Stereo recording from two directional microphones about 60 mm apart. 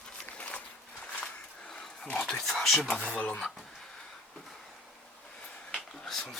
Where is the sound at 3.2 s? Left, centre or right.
Centre.